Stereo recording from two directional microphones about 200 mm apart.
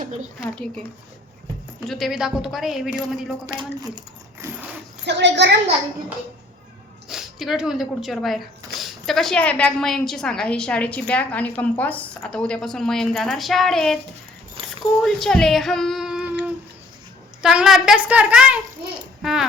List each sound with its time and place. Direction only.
0.3 s a woman's voice: 5° right (ahead or behind)
1.9 s a woman's voice: centre (ahead or behind)
3.4 s speech: 20° right (ahead or behind)
5.0 s a woman's voice: 60° right (ahead or behind)
7.1 s a woman's voice: centre (ahead or behind)
15.0 s speech: centre (ahead or behind)
17.4 s a woman's voice: 5° right (ahead or behind)